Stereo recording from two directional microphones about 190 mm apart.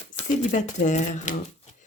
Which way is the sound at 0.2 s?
40° left (ahead or behind).